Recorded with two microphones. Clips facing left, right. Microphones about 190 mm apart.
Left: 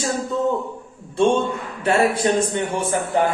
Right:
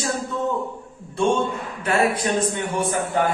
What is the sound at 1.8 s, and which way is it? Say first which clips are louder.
Speech: left 3 dB; 30° left (ahead or behind).